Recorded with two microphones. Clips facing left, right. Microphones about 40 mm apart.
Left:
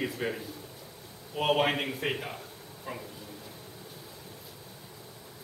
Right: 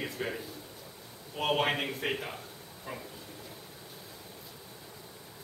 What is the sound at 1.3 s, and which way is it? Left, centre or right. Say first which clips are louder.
A man's voice: left 3 dB; centre.